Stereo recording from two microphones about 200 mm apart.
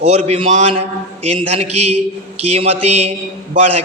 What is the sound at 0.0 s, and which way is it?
A man's voice, 30° right (ahead or behind).